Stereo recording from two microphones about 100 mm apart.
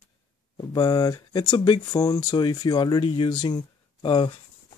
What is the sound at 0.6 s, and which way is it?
Speech, 40° left (ahead or behind).